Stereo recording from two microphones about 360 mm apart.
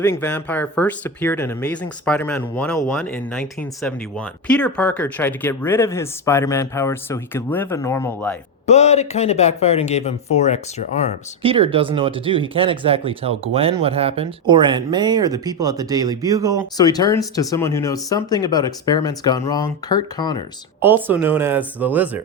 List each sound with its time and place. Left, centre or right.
0.0 s speech: centre
8.6 s speech: centre
11.4 s speech: centre
16.7 s speech: centre
20.8 s speech: centre